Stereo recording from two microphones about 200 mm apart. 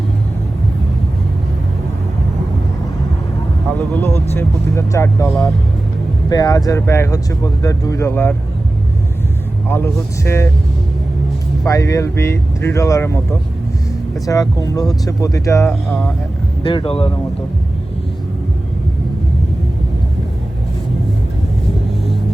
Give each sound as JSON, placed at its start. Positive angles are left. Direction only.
{"t": 3.8, "sound": "speech", "side_deg": 10}
{"t": 9.6, "sound": "speech", "side_deg": 10}
{"t": 11.6, "sound": "speech", "side_deg": 15}
{"t": 15.7, "sound": "speech", "side_deg": 5}
{"t": 16.6, "sound": "speech", "side_deg": 25}